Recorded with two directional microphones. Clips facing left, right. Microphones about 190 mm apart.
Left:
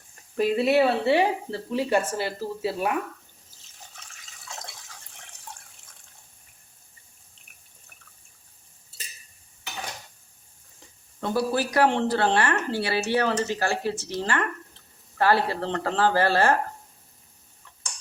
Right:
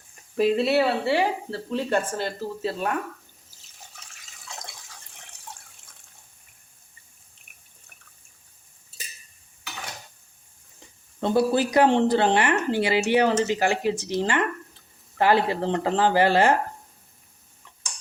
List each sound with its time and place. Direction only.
0.5 s speech: 15° left (ahead or behind)
11.2 s speech: 20° right (ahead or behind)